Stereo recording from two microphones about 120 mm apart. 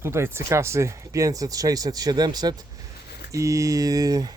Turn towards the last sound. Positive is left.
turn(degrees=-30)  # may be behind; listen again after turning